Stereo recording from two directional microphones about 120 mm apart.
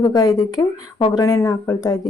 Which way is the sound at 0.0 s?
35° left (ahead or behind).